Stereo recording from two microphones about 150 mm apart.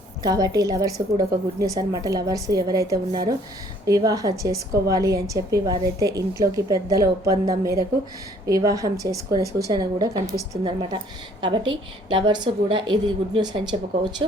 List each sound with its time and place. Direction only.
0.2 s a woman's voice: 25° right (ahead or behind)